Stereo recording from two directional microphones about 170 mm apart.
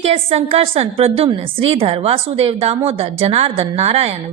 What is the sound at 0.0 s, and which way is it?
A woman's voice, 35° right (ahead or behind).